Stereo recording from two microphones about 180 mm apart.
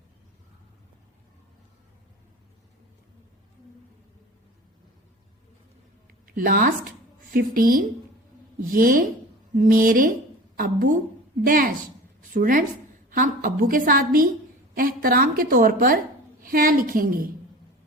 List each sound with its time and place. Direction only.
6.2 s a woman's voice: 50° right (ahead or behind)
11.4 s a woman's voice: 50° right (ahead or behind)